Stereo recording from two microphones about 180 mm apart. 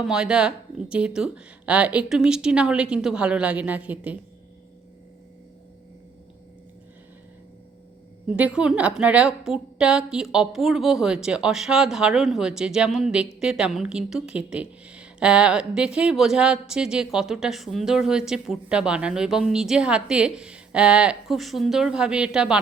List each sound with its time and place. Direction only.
0.0 s a woman's voice: 5° right (ahead or behind)
8.4 s a woman's voice: 5° right (ahead or behind)